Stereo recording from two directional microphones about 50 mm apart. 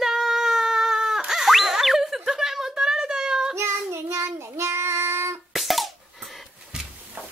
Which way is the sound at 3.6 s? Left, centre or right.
Right.